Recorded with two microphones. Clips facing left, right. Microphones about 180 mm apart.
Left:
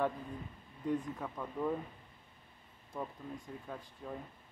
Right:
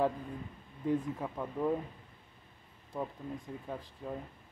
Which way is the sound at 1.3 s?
15° right (ahead or behind).